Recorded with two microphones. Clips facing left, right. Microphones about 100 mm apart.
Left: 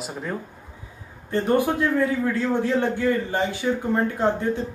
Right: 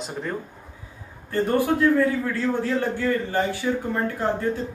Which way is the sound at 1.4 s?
20° left (ahead or behind).